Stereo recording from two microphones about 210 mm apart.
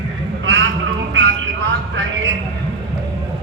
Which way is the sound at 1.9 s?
65° right (ahead or behind).